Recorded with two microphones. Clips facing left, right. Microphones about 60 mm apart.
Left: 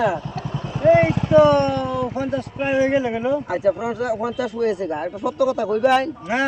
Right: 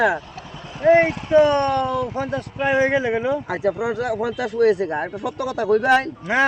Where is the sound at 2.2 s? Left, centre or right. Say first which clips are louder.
Even; right.